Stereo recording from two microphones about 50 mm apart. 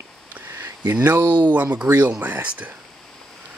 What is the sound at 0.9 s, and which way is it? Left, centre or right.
Speech, right.